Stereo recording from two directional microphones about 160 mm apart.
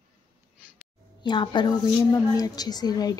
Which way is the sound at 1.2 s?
30° left (ahead or behind).